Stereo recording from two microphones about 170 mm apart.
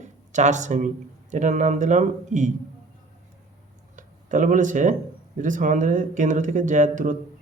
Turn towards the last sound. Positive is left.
turn(degrees=-50)  # may be behind; listen again after turning